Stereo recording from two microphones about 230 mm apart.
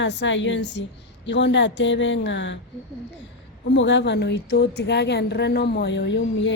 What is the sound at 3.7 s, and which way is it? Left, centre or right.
A woman's voice, left.